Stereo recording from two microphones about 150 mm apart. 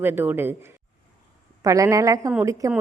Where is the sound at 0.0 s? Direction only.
15° right (ahead or behind).